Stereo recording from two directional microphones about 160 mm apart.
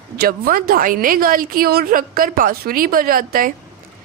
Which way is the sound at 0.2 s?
70° right (ahead or behind).